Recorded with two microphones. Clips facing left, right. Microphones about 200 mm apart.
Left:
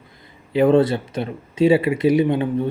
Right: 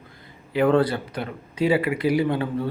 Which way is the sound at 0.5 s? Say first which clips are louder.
Left 4 dB; 25° left (ahead or behind).